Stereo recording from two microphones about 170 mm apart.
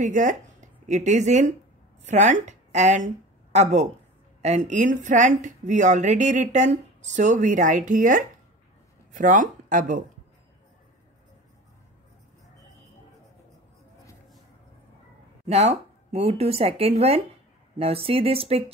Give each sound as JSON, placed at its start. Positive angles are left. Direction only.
{"t": 0.0, "sound": "a woman's voice", "side_deg": -50}
{"t": 15.4, "sound": "speech", "side_deg": -40}